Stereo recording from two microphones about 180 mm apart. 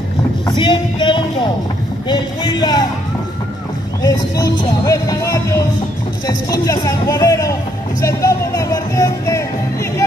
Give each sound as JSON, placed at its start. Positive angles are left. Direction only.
{"t": 0.5, "sound": "speech", "side_deg": 25}
{"t": 4.0, "sound": "speech", "side_deg": 20}
{"t": 6.6, "sound": "speech", "side_deg": 20}
{"t": 8.0, "sound": "music", "side_deg": 15}